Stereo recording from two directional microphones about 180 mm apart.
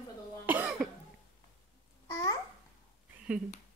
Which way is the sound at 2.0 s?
20° left (ahead or behind).